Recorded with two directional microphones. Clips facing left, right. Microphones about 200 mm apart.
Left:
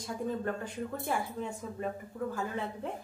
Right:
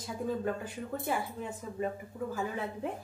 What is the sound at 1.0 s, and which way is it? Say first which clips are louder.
Speech: even; 5° right (ahead or behind).